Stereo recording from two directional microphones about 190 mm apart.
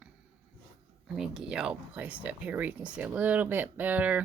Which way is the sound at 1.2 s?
Centre (ahead or behind).